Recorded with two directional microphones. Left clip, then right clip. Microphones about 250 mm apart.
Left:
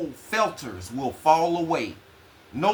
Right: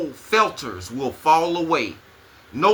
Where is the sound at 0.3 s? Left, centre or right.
Centre.